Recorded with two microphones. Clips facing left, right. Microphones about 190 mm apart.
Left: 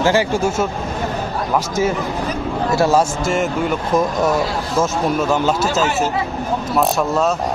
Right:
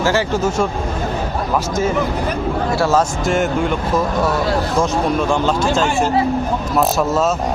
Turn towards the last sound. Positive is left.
turn(degrees=5)  # may be behind; listen again after turning